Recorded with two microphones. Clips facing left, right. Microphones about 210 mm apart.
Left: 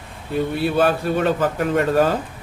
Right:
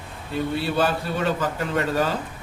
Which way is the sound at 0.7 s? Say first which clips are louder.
Left 7 dB; 55° left (ahead or behind).